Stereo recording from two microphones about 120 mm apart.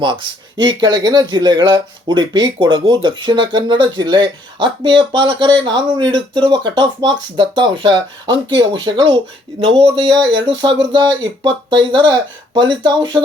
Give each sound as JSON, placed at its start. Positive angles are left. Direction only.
{"t": 0.0, "sound": "speech", "side_deg": -40}